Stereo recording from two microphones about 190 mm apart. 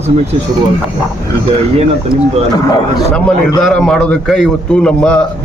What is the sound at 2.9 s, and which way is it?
Speech, 5° left (ahead or behind).